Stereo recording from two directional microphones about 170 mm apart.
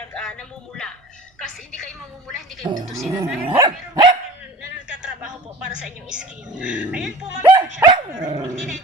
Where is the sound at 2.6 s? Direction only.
25° right (ahead or behind).